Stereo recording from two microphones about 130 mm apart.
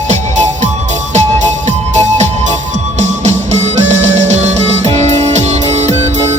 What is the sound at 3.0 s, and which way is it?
Music, 60° right (ahead or behind).